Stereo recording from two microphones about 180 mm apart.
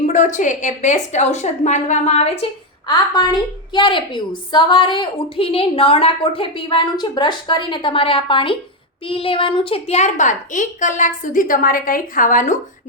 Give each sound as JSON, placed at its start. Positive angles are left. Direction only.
{"t": 0.0, "sound": "a woman's voice", "side_deg": 45}
{"t": 2.8, "sound": "a woman's voice", "side_deg": 25}